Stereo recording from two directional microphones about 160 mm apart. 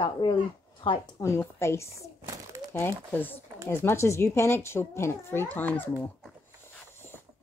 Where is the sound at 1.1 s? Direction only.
15° left (ahead or behind).